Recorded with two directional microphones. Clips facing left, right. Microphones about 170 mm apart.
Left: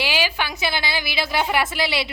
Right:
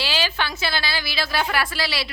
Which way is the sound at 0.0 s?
15° left (ahead or behind).